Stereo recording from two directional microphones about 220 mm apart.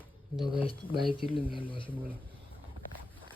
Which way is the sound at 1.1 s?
25° left (ahead or behind).